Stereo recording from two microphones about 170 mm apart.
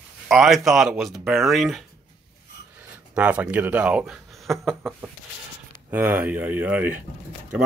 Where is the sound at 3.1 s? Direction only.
5° right (ahead or behind).